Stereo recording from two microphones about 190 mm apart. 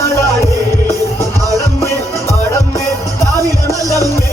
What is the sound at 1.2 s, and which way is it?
Music, 15° left (ahead or behind).